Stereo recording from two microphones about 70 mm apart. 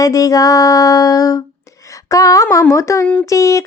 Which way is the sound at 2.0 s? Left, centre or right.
Left.